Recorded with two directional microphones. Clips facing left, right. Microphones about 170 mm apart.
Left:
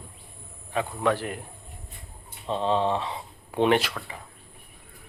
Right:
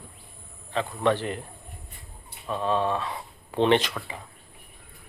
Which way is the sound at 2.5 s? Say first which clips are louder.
Left 1 dB; 20° left (ahead or behind).